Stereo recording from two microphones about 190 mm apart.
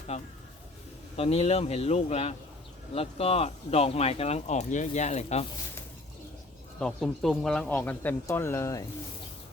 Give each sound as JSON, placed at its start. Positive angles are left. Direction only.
{"t": 0.1, "sound": "speech", "side_deg": 35}
{"t": 6.7, "sound": "speech", "side_deg": 0}